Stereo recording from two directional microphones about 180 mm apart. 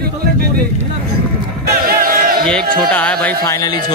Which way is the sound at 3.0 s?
10° left (ahead or behind).